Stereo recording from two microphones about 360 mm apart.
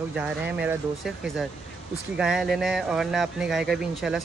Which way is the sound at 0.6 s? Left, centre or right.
Centre.